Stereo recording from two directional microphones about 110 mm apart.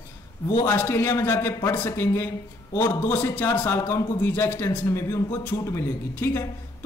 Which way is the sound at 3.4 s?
25° left (ahead or behind).